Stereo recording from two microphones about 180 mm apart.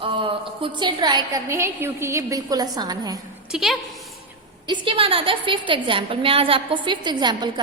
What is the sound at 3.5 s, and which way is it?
Speech, centre (ahead or behind).